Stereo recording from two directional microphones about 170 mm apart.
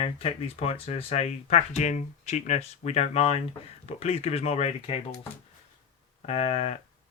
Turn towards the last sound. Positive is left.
turn(degrees=40)  # may be behind; listen again after turning